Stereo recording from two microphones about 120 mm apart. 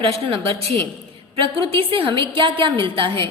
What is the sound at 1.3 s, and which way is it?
A woman's voice, 50° right (ahead or behind).